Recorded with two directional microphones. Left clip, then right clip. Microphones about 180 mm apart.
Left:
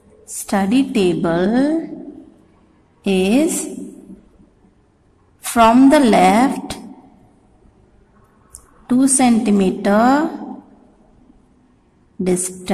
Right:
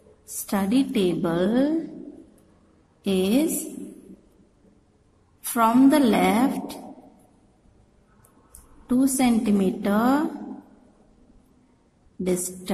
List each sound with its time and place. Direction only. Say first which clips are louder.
0.4 s a woman's voice: left 7 dB; 10° left (ahead or behind)
3.0 s a woman's voice: left 7 dB; 10° left (ahead or behind)
5.4 s a woman's voice: left 8 dB; 20° left (ahead or behind)
8.8 s a woman's voice: left 7 dB; 10° left (ahead or behind)
12.3 s a woman's voice: left 7 dB; 10° left (ahead or behind)